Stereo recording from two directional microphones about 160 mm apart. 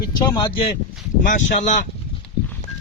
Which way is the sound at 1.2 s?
55° left (ahead or behind).